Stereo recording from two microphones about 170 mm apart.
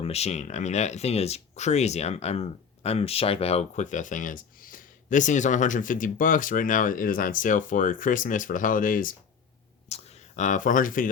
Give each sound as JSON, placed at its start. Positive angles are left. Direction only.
{"t": 0.0, "sound": "speech", "side_deg": 40}
{"t": 9.9, "sound": "speech", "side_deg": 40}